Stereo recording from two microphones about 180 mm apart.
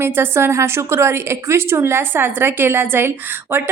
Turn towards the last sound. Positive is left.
turn(degrees=-10)  # may be behind; listen again after turning